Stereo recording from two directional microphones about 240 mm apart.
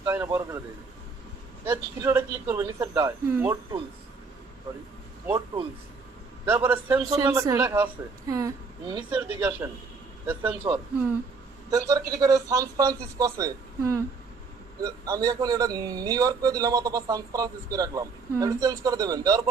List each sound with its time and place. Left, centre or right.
0.0 s speech: centre
1.6 s speech: centre
6.4 s speech: centre
10.6 s speech: centre